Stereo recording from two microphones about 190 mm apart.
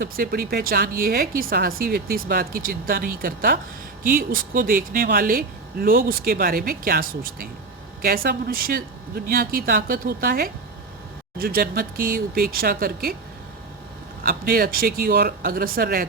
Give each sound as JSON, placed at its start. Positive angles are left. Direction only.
{"t": 0.0, "sound": "speech", "side_deg": -50}
{"t": 14.3, "sound": "speech", "side_deg": -50}